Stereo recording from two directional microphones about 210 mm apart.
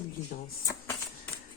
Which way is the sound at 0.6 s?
15° left (ahead or behind).